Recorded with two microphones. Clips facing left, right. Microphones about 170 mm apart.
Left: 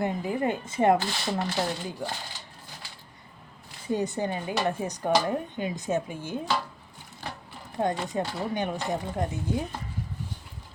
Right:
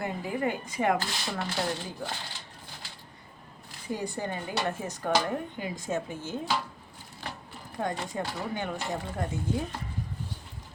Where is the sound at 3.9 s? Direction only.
20° left (ahead or behind).